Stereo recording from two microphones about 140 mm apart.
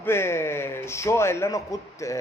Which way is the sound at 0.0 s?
15° left (ahead or behind).